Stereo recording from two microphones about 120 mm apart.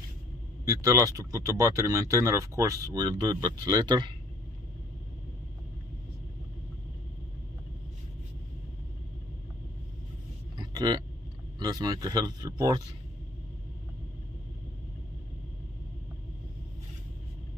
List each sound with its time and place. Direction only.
0.7 s speech: 30° right (ahead or behind)
10.6 s a sound: 35° right (ahead or behind)
11.6 s speech: 35° right (ahead or behind)